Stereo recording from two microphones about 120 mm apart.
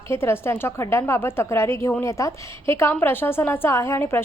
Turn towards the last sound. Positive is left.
turn(degrees=20)  # may be behind; listen again after turning